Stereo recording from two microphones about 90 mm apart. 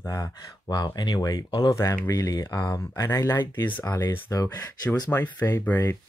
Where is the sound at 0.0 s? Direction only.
40° left (ahead or behind).